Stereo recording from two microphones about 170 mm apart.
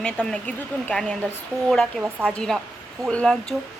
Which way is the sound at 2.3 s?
5° left (ahead or behind).